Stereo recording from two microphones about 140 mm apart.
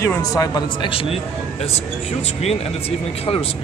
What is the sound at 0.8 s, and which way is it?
Speech, 40° left (ahead or behind).